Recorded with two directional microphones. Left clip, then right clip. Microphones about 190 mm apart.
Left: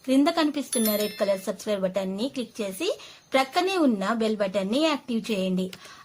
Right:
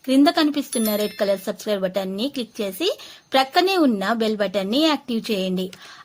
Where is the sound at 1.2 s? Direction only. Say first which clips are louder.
Right 4 dB; 25° right (ahead or behind).